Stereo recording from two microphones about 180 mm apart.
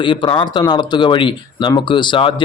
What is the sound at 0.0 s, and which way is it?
A man's voice, 25° left (ahead or behind).